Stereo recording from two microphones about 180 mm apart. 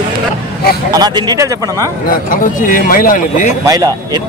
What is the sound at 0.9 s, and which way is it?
Speech, 25° right (ahead or behind).